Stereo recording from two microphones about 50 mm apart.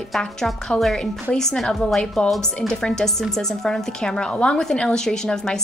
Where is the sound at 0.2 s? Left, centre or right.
Centre.